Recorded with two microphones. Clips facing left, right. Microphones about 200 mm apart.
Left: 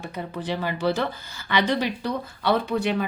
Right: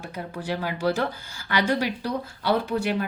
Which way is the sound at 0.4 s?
10° right (ahead or behind).